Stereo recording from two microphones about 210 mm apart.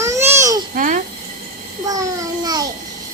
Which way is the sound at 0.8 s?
40° right (ahead or behind).